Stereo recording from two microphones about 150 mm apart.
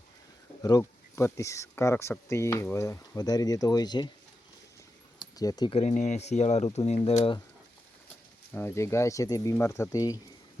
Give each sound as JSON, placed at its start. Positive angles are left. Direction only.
{"t": 0.6, "sound": "speech", "side_deg": 20}
{"t": 5.2, "sound": "a sound", "side_deg": 25}
{"t": 5.7, "sound": "speech", "side_deg": 50}
{"t": 8.5, "sound": "speech", "side_deg": 20}